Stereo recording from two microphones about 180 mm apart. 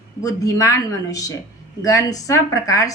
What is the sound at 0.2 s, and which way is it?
A woman's voice, 20° left (ahead or behind).